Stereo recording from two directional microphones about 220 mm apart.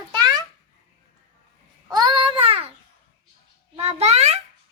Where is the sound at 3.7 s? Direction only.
30° right (ahead or behind).